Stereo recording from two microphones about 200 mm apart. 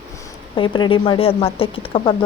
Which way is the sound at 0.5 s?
25° left (ahead or behind).